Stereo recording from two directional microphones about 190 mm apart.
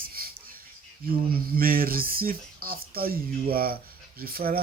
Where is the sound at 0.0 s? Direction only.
50° right (ahead or behind).